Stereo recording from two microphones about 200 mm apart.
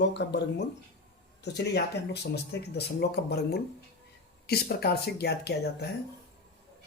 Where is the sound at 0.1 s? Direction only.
60° left (ahead or behind).